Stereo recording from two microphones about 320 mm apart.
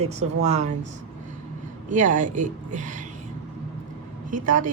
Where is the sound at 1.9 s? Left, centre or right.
Right.